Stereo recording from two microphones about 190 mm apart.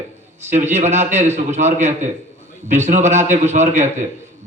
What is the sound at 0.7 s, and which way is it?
A man's voice, 35° right (ahead or behind).